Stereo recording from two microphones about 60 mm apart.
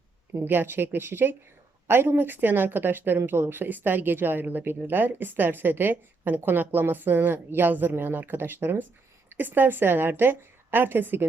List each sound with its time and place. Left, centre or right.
0.3 s speech: right